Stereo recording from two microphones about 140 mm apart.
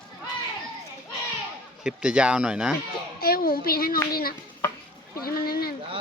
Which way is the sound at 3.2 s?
90° left.